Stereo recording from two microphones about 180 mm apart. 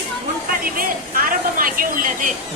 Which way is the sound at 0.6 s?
55° right (ahead or behind).